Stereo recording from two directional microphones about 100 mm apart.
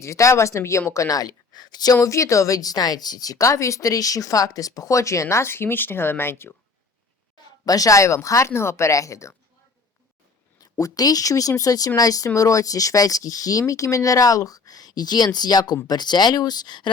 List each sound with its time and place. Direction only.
0.0 s speech: 30° left (ahead or behind)
7.6 s speech: 35° left (ahead or behind)
10.6 s speech: 35° left (ahead or behind)